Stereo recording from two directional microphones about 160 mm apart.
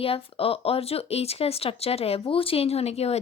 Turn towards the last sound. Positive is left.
turn(degrees=40)  # may be behind; listen again after turning